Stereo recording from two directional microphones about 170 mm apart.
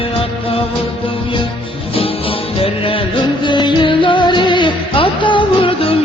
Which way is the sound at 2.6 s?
35° left (ahead or behind).